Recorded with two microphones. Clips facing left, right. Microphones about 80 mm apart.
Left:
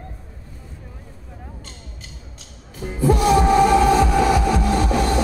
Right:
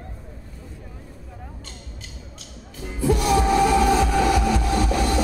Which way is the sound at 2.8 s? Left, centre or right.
Left.